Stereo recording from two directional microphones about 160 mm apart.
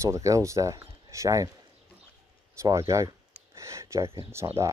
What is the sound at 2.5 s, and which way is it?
Speech, 20° right (ahead or behind).